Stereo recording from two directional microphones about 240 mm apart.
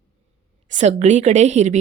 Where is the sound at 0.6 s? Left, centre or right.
Right.